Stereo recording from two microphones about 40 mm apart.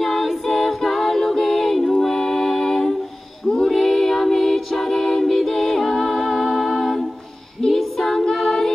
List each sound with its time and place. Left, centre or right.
0.0 s a capella: centre
3.6 s music: centre
7.6 s a capella: centre